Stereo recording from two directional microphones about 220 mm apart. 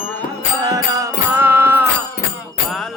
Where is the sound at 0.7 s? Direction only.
15° right (ahead or behind).